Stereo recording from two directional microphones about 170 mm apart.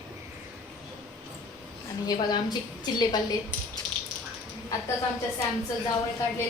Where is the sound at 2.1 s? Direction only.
25° left (ahead or behind).